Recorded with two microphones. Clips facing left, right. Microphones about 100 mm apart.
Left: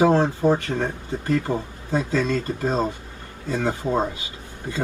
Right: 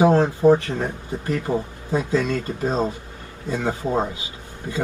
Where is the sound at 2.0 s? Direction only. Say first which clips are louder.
Right 1 dB; 15° right (ahead or behind).